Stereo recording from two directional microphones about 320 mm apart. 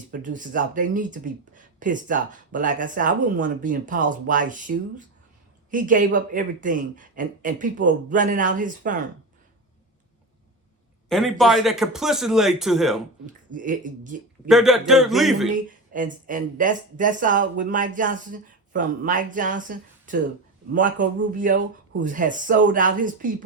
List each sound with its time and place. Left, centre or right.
0.1 s speech: right
11.1 s speech: centre
13.2 s speech: right
14.4 s speech: centre
15.9 s speech: right